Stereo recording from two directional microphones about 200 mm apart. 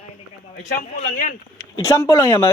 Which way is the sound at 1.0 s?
45° left (ahead or behind).